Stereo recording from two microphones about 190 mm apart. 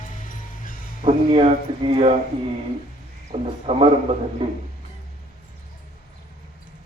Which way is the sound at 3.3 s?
30° right (ahead or behind).